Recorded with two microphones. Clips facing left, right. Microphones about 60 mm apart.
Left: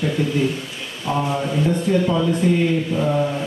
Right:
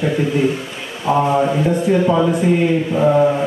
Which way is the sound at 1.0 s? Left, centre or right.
Right.